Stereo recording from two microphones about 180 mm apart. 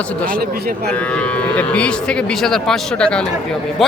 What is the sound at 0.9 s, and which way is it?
Speech, 5° left (ahead or behind).